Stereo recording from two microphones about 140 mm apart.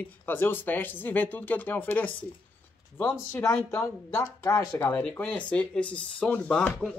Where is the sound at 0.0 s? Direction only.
15° left (ahead or behind).